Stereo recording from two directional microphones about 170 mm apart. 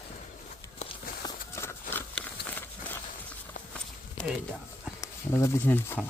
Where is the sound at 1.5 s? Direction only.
15° left (ahead or behind).